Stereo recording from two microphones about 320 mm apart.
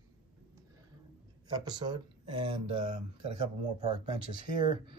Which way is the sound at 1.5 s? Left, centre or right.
Centre.